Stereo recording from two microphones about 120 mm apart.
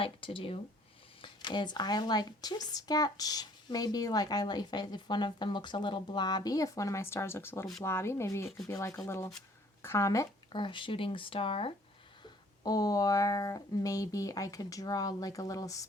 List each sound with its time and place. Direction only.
0.0 s speech: 50° left (ahead or behind)
1.2 s speech: 40° left (ahead or behind)
10.5 s speech: 40° left (ahead or behind)
12.6 s speech: 30° left (ahead or behind)